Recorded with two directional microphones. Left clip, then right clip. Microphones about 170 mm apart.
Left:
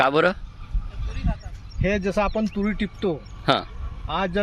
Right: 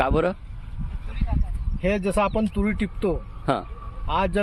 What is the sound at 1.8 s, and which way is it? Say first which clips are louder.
A man's voice: even; 25° right (ahead or behind).